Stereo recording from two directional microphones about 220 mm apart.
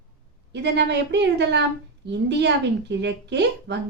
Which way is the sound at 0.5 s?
50° right (ahead or behind).